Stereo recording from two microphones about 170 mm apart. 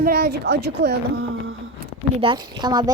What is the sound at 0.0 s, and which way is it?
A woman's voice, 70° right (ahead or behind).